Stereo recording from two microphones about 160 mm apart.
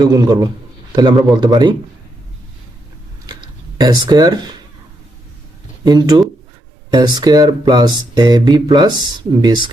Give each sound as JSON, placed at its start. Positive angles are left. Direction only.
{"t": 0.0, "sound": "speech", "side_deg": -25}
{"t": 3.2, "sound": "a sound", "side_deg": -25}
{"t": 5.8, "sound": "speech", "side_deg": -25}